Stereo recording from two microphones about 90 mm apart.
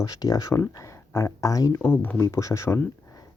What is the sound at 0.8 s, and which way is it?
Speech, 35° left (ahead or behind).